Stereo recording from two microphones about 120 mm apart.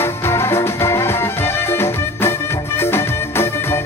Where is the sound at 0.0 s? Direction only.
20° left (ahead or behind).